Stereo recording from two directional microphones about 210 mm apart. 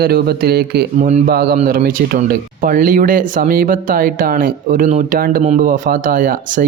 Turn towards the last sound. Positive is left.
turn(degrees=-40)  # may be behind; listen again after turning